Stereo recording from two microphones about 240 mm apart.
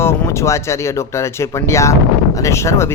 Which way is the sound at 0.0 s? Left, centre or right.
Centre.